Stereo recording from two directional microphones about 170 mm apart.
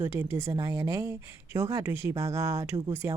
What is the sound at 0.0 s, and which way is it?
Speech, 10° right (ahead or behind).